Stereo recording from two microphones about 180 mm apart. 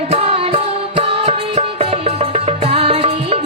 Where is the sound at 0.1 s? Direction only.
30° right (ahead or behind).